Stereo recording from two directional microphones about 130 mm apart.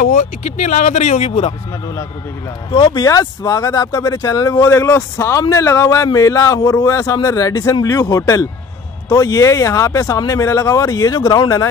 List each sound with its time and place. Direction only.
0.0 s speech: 65° left (ahead or behind)
2.7 s speech: 35° left (ahead or behind)